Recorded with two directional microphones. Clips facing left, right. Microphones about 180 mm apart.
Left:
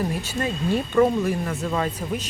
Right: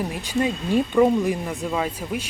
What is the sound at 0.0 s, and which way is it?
Speech, 15° right (ahead or behind).